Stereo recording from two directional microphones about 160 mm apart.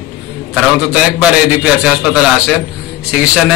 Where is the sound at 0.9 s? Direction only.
5° right (ahead or behind).